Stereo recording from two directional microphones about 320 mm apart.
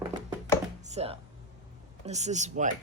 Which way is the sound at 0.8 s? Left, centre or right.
Right.